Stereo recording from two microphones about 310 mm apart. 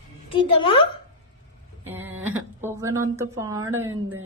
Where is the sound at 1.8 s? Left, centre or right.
Centre.